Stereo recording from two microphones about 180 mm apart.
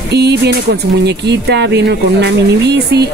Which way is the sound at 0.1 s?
65° right (ahead or behind).